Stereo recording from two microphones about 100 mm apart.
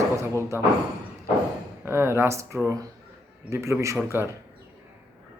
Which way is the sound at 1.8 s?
25° right (ahead or behind).